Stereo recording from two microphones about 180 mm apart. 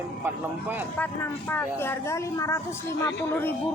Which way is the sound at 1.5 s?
10° left (ahead or behind).